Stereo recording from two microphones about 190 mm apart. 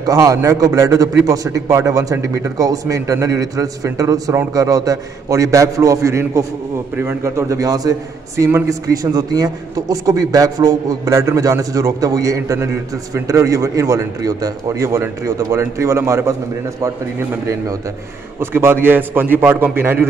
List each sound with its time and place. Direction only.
0.0 s a man's voice: 20° right (ahead or behind)
18.4 s a man's voice: 10° right (ahead or behind)